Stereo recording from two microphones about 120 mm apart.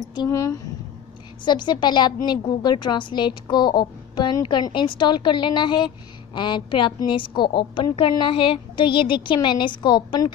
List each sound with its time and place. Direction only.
0.3 s a woman's voice: 25° left (ahead or behind)
1.4 s a woman's voice: 40° left (ahead or behind)